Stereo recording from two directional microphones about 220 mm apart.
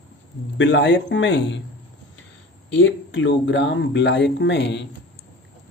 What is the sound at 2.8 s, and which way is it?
Speech, 60° left (ahead or behind).